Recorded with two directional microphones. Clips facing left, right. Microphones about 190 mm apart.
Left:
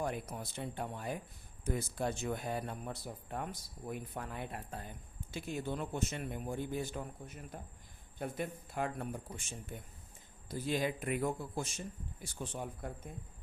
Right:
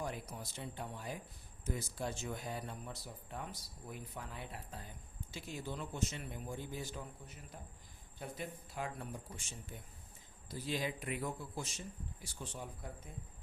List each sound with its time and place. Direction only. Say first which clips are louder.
0.0 s speech: left 5 dB; 55° left (ahead or behind)